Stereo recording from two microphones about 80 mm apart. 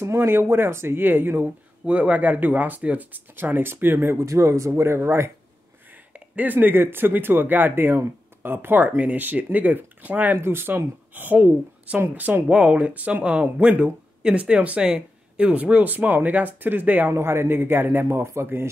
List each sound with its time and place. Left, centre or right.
0.0 s speech: right
6.1 s speech: right